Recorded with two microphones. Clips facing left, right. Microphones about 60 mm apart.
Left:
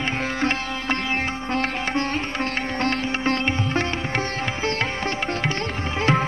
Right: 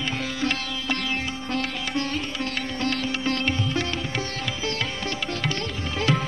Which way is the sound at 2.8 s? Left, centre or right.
Left.